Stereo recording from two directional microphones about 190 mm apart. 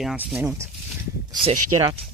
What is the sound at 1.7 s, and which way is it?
Speech, 30° right (ahead or behind).